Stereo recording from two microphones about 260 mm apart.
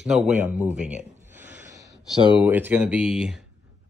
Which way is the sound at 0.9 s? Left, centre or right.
Centre.